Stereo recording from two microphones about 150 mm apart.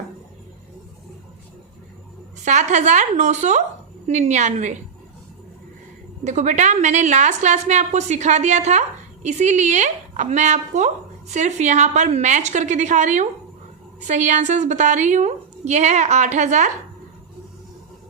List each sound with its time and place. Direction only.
2.4 s a woman's voice: 50° right (ahead or behind)
6.2 s a woman's voice: 55° right (ahead or behind)